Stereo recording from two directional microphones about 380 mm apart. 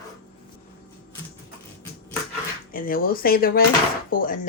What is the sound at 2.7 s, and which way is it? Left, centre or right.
A woman's voice, left.